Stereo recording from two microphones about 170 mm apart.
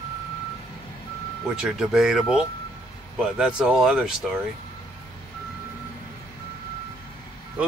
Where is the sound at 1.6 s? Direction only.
Centre (ahead or behind).